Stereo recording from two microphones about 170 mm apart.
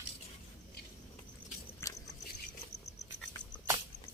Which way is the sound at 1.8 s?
15° left (ahead or behind).